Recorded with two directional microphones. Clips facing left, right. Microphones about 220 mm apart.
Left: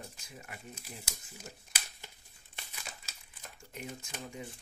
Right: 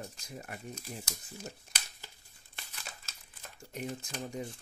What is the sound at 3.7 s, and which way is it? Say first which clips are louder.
Speech: right 5 dB; 35° right (ahead or behind).